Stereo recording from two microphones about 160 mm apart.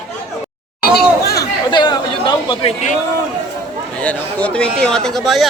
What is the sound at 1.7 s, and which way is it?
A man's voice, 30° left (ahead or behind).